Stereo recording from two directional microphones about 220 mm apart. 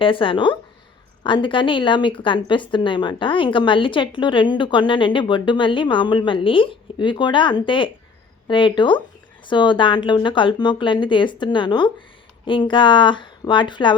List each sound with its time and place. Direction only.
0.0 s a woman's voice: 25° left (ahead or behind)